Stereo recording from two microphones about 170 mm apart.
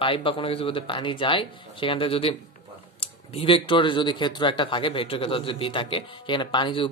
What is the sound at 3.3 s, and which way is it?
Speech, 30° left (ahead or behind).